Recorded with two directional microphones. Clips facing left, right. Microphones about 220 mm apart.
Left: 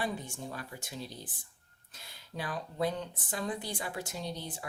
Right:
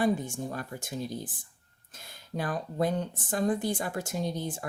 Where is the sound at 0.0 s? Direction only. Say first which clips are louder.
Right 9 dB; 45° right (ahead or behind).